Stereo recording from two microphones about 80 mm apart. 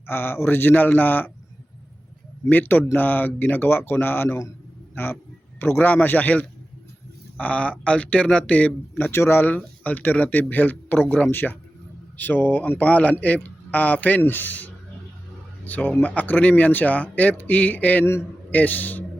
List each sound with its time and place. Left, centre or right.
0.1 s speech: left
2.5 s speech: left
5.5 s speech: left